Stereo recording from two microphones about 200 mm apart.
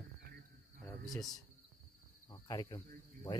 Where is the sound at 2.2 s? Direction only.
15° left (ahead or behind).